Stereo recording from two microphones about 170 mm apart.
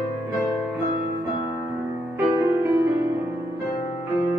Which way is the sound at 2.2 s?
15° right (ahead or behind).